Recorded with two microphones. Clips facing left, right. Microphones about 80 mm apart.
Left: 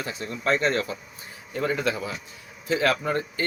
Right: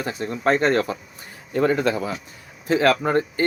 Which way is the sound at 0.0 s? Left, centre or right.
Right.